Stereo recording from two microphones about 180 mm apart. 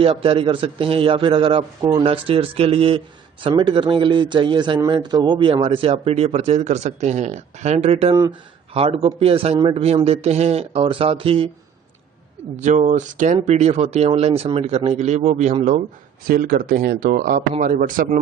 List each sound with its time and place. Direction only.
0.0 s speech: 30° right (ahead or behind)
12.5 s speech: 40° right (ahead or behind)
16.2 s speech: 55° right (ahead or behind)